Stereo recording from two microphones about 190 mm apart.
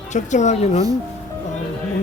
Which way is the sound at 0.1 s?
40° left (ahead or behind).